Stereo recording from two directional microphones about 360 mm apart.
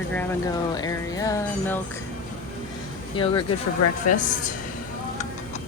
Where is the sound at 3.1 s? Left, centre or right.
Centre.